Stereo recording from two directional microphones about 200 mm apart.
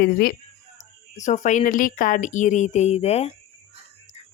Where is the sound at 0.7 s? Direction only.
35° left (ahead or behind).